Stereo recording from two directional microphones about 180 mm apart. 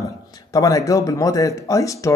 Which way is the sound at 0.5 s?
20° left (ahead or behind).